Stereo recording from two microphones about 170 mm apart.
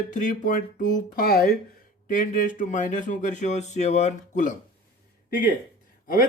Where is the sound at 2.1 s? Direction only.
50° left (ahead or behind).